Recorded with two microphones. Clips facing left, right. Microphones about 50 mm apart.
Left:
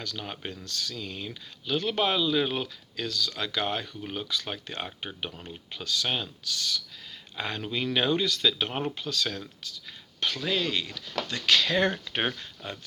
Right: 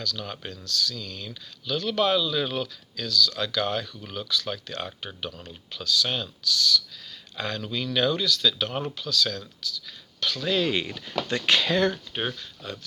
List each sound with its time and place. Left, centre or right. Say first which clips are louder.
0.0 s speech: right 2 dB; left
10.4 s speech: right 4 dB; centre
10.7 s speech: right 4 dB; right
12.3 s speech: right 1 dB; left